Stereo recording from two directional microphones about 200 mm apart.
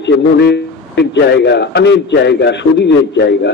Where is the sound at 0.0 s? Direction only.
55° left (ahead or behind).